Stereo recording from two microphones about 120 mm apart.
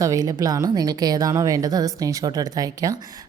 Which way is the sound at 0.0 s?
30° right (ahead or behind).